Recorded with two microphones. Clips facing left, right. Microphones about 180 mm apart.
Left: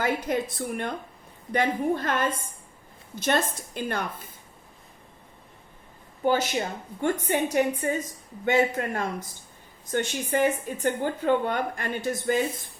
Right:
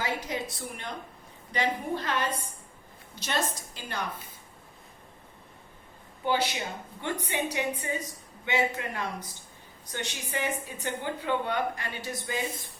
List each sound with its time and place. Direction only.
0.0 s speech: 55° left (ahead or behind)
6.2 s speech: 45° left (ahead or behind)